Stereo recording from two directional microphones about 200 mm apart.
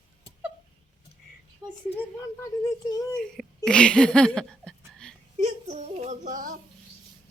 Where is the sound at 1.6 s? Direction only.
15° right (ahead or behind).